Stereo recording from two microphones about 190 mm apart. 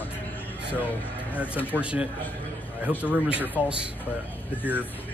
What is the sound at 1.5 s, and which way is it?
Speech, 10° left (ahead or behind).